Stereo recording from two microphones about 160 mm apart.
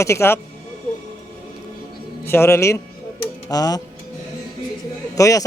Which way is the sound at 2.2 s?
15° left (ahead or behind).